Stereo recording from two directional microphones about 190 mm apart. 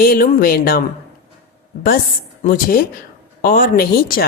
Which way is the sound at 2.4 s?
50° left (ahead or behind).